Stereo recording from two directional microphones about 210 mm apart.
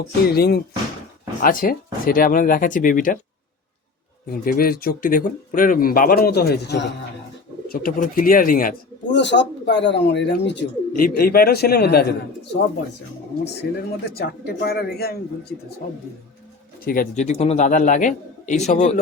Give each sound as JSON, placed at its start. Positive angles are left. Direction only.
{"t": 0.3, "sound": "a man's voice", "side_deg": 50}
{"t": 4.4, "sound": "speech", "side_deg": 45}
{"t": 9.0, "sound": "speech", "side_deg": 55}
{"t": 10.9, "sound": "speech", "side_deg": 45}
{"t": 13.4, "sound": "speech", "side_deg": 50}
{"t": 16.8, "sound": "a man's voice", "side_deg": 40}